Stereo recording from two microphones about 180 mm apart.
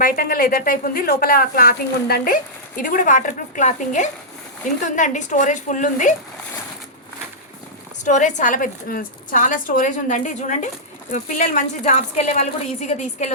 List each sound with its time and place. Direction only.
0.0 s a woman's voice: 50° left (ahead or behind)
8.0 s a woman's voice: 45° left (ahead or behind)